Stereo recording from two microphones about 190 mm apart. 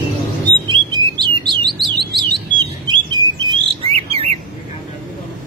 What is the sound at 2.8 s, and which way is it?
Bird, 20° right (ahead or behind).